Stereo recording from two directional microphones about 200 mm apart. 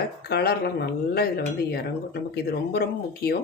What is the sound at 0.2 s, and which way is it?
Speech, 50° left (ahead or behind).